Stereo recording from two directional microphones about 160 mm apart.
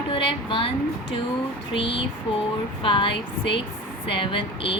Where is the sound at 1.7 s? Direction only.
35° left (ahead or behind).